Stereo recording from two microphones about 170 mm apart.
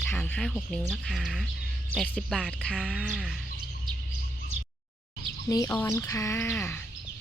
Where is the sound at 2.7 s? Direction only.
5° right (ahead or behind).